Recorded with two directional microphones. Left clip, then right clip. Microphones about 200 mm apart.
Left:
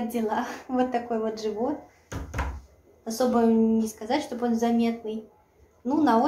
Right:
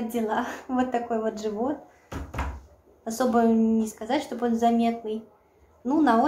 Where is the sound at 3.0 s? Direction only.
15° right (ahead or behind).